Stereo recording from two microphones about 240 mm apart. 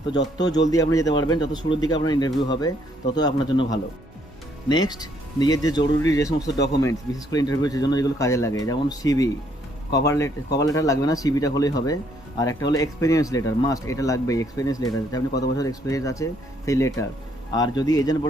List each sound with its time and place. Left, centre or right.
0.3 s speech: centre